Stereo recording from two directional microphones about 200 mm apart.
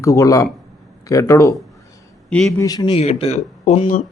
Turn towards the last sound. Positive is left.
turn(degrees=35)  # may be behind; listen again after turning